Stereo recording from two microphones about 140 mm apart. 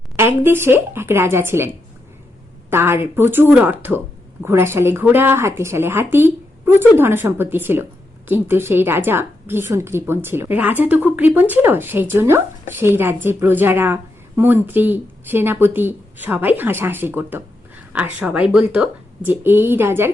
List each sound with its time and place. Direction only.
0.2 s a woman's voice: 15° right (ahead or behind)